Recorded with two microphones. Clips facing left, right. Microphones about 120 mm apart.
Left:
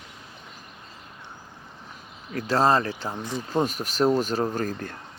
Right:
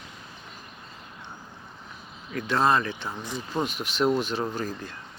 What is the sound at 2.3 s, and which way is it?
Speech, 35° left (ahead or behind).